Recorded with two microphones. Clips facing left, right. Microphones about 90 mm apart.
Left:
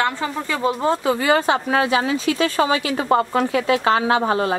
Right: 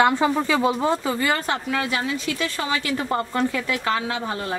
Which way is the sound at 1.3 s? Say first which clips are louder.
Left 9 dB; 90° left.